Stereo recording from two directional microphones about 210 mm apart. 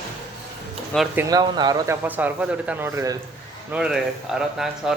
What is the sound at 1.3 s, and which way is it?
A man's voice, 20° right (ahead or behind).